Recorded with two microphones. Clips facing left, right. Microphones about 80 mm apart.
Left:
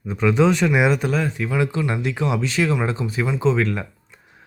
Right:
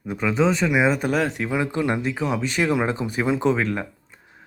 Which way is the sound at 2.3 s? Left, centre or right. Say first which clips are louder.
Right 1 dB; right.